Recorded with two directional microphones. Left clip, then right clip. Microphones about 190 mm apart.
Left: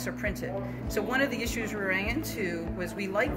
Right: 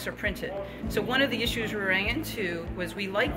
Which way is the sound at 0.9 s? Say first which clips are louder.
Right 2 dB; 25° right (ahead or behind).